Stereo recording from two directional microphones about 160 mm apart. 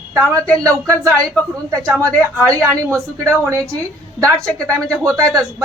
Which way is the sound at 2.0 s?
20° right (ahead or behind).